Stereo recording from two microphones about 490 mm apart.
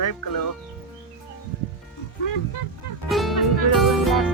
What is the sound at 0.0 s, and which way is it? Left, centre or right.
Speech, left.